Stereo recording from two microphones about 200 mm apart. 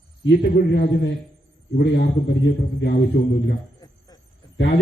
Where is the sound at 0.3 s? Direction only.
60° left (ahead or behind).